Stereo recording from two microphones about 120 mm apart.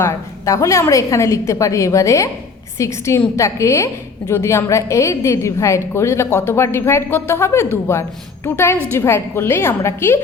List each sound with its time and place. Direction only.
0.0 s a woman's voice: 25° left (ahead or behind)